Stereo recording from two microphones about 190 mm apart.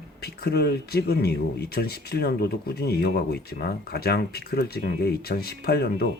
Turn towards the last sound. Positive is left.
turn(degrees=55)  # may be behind; listen again after turning